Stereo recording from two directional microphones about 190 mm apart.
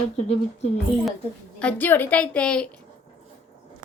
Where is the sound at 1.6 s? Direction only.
10° left (ahead or behind).